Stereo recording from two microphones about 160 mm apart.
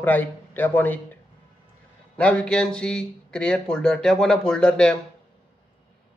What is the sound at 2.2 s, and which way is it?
Speech, 10° left (ahead or behind).